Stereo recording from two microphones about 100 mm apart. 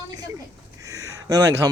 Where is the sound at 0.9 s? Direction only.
35° right (ahead or behind).